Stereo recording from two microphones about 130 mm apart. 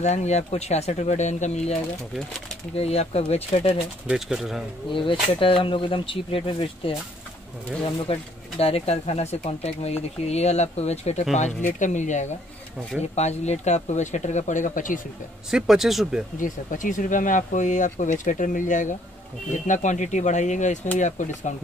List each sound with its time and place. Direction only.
0.0 s speech: 60° left (ahead or behind)
4.1 s speech: 5° right (ahead or behind)
4.9 s speech: 40° left (ahead or behind)
8.1 s speech: 50° left (ahead or behind)
11.3 s speech: 70° left (ahead or behind)
15.5 s speech: 5° right (ahead or behind)
16.3 s speech: 85° left; by 21.5 s 65° left (ahead or behind)